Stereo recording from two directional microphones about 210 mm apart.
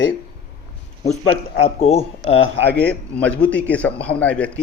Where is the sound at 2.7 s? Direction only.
5° left (ahead or behind).